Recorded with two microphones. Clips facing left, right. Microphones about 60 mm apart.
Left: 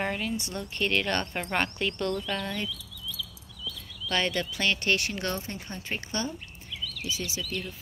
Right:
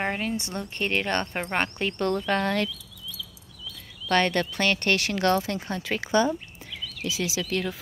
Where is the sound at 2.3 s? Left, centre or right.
Right.